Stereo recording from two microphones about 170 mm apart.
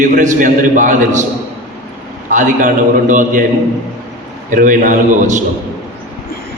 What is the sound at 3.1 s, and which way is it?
Speech, 50° right (ahead or behind).